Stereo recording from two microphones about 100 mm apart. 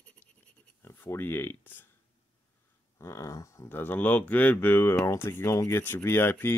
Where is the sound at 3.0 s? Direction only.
30° left (ahead or behind).